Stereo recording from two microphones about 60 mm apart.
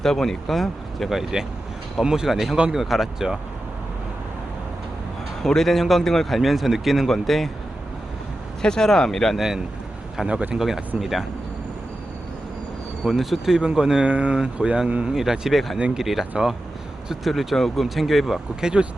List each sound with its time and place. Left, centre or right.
0.0 s a man's voice: centre
5.4 s a man's voice: centre
8.6 s speech: centre
10.2 s a man's voice: centre
13.1 s a man's voice: centre
15.1 s a man's voice: centre
16.4 s speech: centre
17.1 s a man's voice: centre